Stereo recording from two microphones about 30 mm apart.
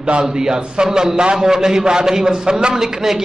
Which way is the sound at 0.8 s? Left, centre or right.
Centre.